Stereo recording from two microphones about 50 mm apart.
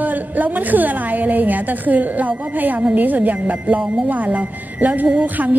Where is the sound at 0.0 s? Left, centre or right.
Right.